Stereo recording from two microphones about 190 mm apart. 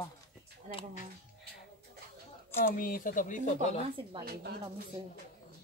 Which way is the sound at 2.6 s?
50° left (ahead or behind).